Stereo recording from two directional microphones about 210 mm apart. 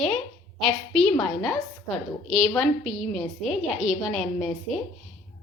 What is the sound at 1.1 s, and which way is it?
Speech, 20° left (ahead or behind).